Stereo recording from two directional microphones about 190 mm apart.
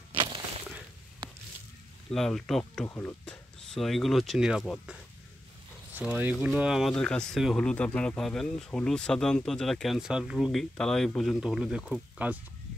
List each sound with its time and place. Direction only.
0.1 s a sound: 25° right (ahead or behind)
2.0 s speech: centre (ahead or behind)
5.9 s speech: 10° right (ahead or behind)